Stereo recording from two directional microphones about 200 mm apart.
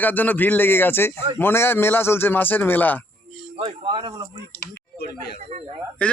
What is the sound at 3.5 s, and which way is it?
Speech, 25° right (ahead or behind).